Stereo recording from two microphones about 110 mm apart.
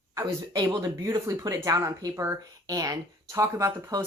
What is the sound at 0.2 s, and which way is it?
Speech, 25° right (ahead or behind).